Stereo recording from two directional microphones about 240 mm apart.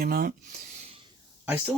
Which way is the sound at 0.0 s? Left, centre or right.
Right.